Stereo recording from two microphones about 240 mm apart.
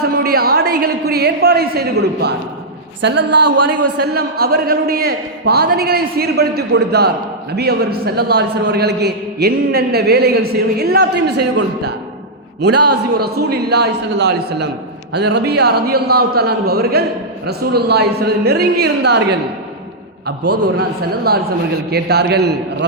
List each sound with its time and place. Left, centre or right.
0.2 s a sound: right
3.2 s speech: right
4.0 s a man's voice: right
12.6 s a man's voice: right
12.9 s a woman's voice: right
21.3 s a man's voice: right